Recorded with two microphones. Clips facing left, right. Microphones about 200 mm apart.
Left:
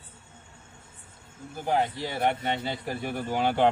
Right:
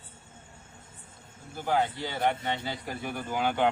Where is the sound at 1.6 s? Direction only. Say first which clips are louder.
Left 1 dB; 25° left (ahead or behind).